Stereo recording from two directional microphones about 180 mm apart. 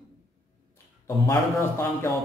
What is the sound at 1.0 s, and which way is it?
Speech, 15° left (ahead or behind).